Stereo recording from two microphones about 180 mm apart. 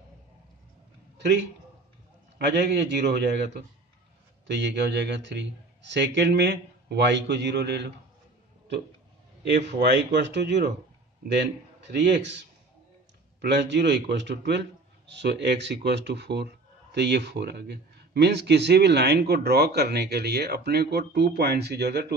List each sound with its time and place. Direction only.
1.1 s a sound: 75° right (ahead or behind)
2.3 s speech: 70° right (ahead or behind)
9.7 s a man's voice: 70° right (ahead or behind)